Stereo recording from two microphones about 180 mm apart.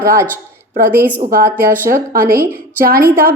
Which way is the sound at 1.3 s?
55° right (ahead or behind).